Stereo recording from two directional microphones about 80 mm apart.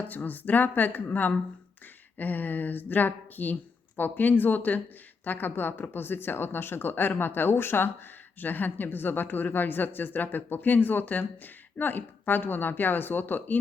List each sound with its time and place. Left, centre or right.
0.1 s a woman's voice: left